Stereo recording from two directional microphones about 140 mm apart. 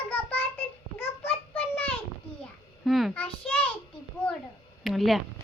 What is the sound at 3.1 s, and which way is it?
Child singing, 10° left (ahead or behind).